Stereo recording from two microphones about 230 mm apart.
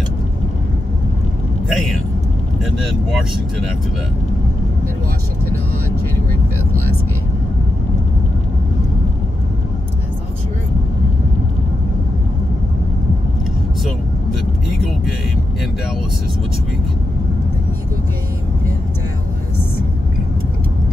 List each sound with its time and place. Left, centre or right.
1.7 s speech: centre